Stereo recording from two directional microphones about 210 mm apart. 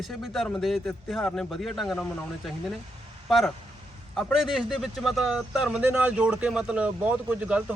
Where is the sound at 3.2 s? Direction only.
Centre (ahead or behind).